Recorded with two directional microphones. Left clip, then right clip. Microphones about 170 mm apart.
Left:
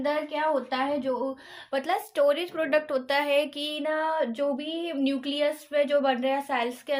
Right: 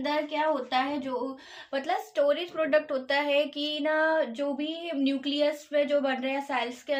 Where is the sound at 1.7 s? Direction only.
40° left (ahead or behind).